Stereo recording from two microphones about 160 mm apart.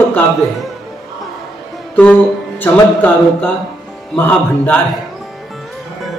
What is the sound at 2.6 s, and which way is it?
A man's voice, 10° left (ahead or behind).